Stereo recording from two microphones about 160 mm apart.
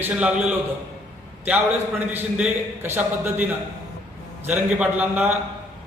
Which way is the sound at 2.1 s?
10° right (ahead or behind).